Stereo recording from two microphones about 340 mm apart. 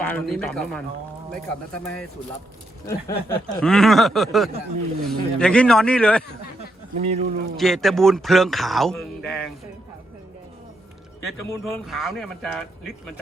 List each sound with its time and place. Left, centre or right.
0.0 s snicker: centre
6.9 s speech: centre
7.5 s snicker: centre
11.5 s snicker: centre